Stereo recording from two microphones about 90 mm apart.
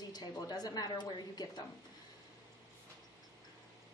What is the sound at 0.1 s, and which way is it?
A woman's voice, 50° left (ahead or behind).